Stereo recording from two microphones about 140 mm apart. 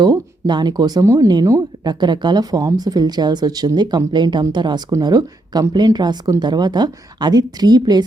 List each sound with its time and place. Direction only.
0.0 s speech: 30° right (ahead or behind)